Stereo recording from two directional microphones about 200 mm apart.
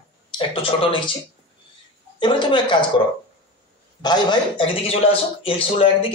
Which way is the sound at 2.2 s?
25° left (ahead or behind).